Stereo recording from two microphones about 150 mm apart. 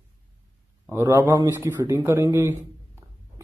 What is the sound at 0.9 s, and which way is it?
A man's voice, 20° right (ahead or behind).